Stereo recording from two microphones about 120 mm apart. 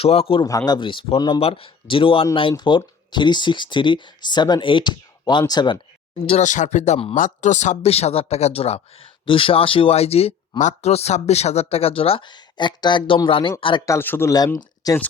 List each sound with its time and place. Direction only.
0.0 s speech: 60° left (ahead or behind)
0.4 s speech: 30° left (ahead or behind)
6.2 s speech: 75° left (ahead or behind); by 10.3 s 55° left (ahead or behind)
10.6 s speech: 75° left (ahead or behind); by 13.8 s 45° left (ahead or behind)
13.8 s a man's voice: 20° left (ahead or behind)
14.3 s speech: 30° left (ahead or behind)